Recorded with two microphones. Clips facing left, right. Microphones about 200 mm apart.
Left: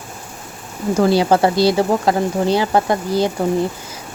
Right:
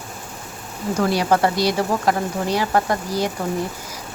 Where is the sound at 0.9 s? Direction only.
30° left (ahead or behind).